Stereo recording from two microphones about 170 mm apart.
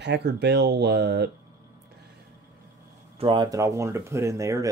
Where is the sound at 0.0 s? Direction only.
90° right.